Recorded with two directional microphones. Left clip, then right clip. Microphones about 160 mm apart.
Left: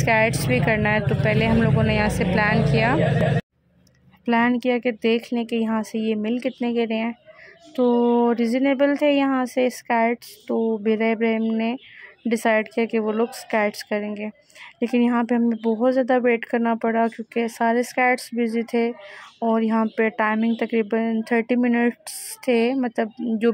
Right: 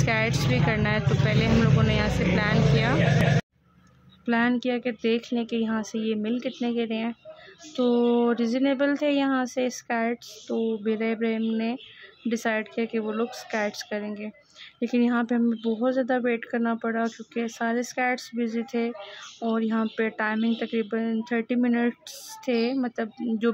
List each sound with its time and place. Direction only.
0.0 s speech: 15° left (ahead or behind)
4.3 s speech: 20° left (ahead or behind)
7.7 s a sound: 5° left (ahead or behind)
8.3 s speech: 15° left (ahead or behind)